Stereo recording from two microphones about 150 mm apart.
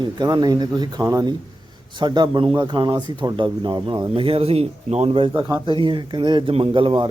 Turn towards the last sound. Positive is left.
turn(degrees=-35)  # may be behind; listen again after turning